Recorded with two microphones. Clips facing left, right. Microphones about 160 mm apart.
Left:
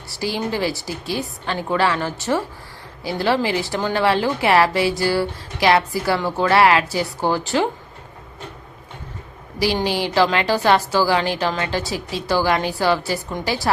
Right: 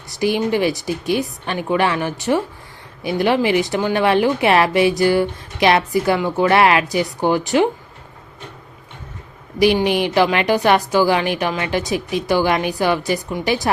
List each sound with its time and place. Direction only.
0.1 s speech: 20° right (ahead or behind)
9.6 s speech: 20° right (ahead or behind)